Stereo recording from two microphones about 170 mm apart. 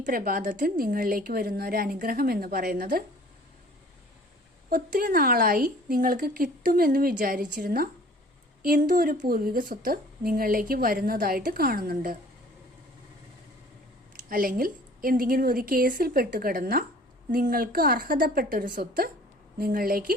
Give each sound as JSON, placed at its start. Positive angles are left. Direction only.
{"t": 0.0, "sound": "a woman's voice", "side_deg": -55}
{"t": 4.7, "sound": "a woman's voice", "side_deg": -55}
{"t": 14.3, "sound": "a woman's voice", "side_deg": -55}